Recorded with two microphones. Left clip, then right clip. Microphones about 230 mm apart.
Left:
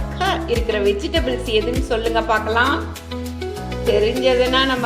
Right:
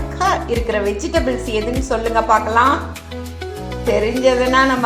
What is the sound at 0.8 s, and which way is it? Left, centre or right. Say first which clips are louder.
A woman's voice: right 1 dB; centre.